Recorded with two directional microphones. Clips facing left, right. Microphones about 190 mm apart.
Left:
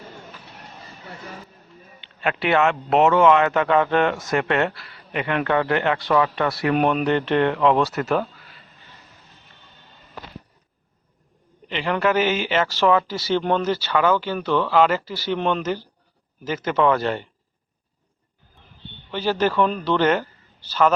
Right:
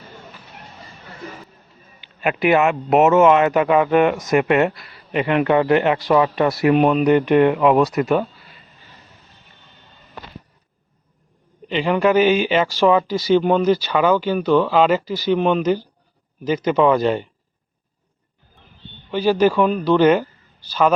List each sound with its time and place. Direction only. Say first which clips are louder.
2.2 s a man's voice: right 3 dB; 15° right (ahead or behind)
6.7 s speech: right 2 dB; centre (ahead or behind)
7.0 s a man's voice: right 6 dB; 10° right (ahead or behind)
11.7 s a man's voice: right 5 dB; 15° right (ahead or behind)
19.1 s a man's voice: right 5 dB; 15° right (ahead or behind)